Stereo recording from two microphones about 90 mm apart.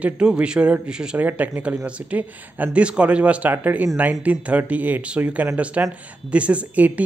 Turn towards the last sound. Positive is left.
turn(degrees=-15)  # may be behind; listen again after turning